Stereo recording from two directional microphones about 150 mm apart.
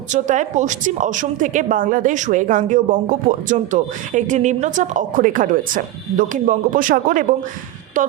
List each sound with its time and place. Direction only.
0.1 s a woman's voice: 55° right (ahead or behind)